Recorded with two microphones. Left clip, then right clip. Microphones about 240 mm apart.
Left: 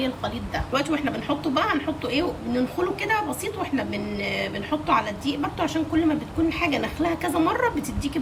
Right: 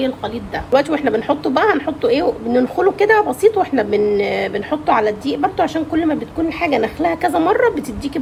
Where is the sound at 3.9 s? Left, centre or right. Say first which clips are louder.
Right 13 dB; centre.